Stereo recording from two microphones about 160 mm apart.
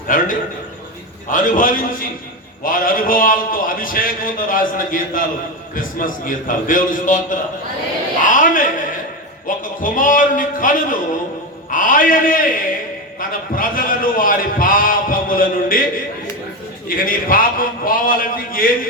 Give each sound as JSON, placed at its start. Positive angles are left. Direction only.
{"t": 0.1, "sound": "a man's voice", "side_deg": 55}
{"t": 1.3, "sound": "a man's voice", "side_deg": 55}
{"t": 9.5, "sound": "music", "side_deg": 60}
{"t": 9.8, "sound": "a man's voice", "side_deg": 55}